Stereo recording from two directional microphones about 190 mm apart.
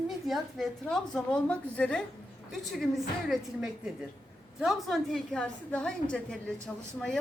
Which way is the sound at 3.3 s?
5° right (ahead or behind).